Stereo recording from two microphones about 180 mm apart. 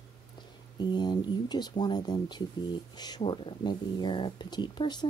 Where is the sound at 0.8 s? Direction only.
25° left (ahead or behind).